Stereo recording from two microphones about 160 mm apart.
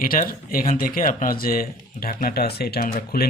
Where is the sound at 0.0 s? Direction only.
60° left (ahead or behind).